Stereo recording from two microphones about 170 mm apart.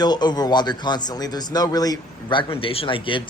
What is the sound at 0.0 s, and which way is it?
A man's voice, 25° left (ahead or behind).